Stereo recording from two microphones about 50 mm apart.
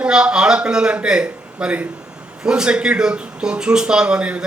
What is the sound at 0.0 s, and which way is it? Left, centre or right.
A man's voice, centre.